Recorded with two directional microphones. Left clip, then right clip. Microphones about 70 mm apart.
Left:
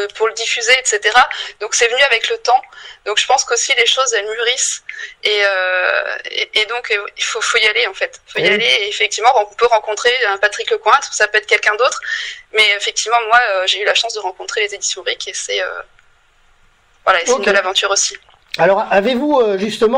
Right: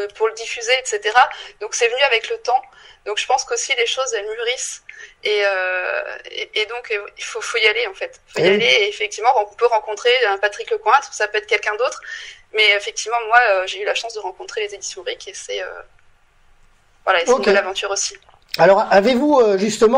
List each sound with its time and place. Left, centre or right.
0.0 s a woman's voice: left
17.0 s a woman's voice: left
19.3 s speech: right
19.8 s a man's voice: centre